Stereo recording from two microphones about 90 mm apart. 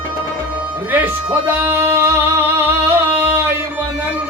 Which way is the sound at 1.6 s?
25° right (ahead or behind).